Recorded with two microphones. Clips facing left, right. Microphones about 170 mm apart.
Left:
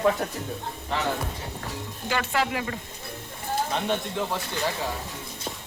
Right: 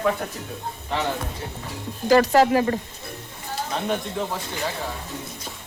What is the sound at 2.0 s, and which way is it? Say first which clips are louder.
Speech: right 11 dB; 40° right (ahead or behind).